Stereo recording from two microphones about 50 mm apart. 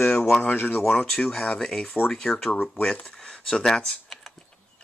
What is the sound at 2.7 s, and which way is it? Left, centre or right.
Speech, centre.